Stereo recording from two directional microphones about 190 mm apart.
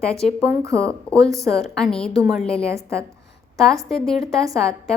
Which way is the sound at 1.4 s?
Centre (ahead or behind).